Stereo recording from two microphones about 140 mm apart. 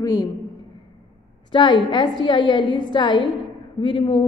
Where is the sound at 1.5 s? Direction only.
35° left (ahead or behind).